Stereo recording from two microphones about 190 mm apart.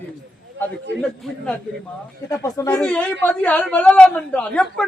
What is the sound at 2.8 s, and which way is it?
A woman's voice, 5° left (ahead or behind).